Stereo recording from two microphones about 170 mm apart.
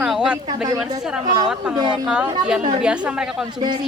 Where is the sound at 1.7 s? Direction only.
30° right (ahead or behind).